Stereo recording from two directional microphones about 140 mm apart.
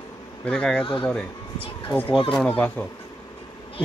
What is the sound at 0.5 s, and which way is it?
Speech, 10° left (ahead or behind).